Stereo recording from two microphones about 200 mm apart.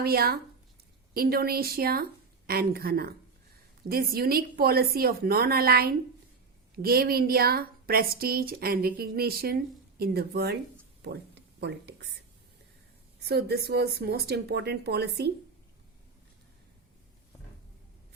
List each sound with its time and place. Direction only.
0.0 s a woman's voice: 50° right (ahead or behind)
11.0 s a sound: 55° right (ahead or behind)
13.2 s a woman's voice: 50° right (ahead or behind)